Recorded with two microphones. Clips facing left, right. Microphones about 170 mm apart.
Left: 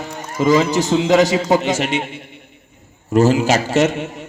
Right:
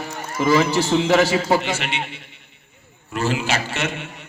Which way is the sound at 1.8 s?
45° left (ahead or behind).